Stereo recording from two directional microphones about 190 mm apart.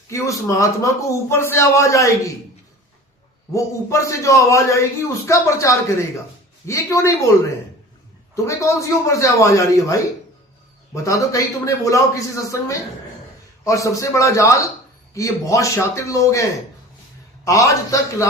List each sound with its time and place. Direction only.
0.1 s a man's voice: 15° left (ahead or behind)
3.5 s a man's voice: 15° left (ahead or behind)
8.4 s a man's voice: 15° left (ahead or behind)